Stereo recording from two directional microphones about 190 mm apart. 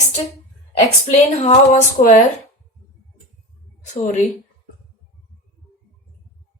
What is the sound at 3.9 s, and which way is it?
Speech, 40° left (ahead or behind).